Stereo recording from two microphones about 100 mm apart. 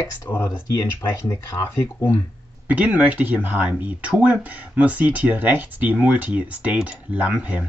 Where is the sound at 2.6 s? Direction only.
15° right (ahead or behind).